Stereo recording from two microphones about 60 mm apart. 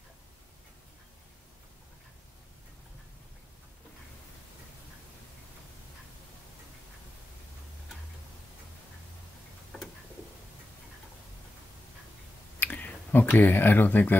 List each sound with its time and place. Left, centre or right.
12.5 s speech: left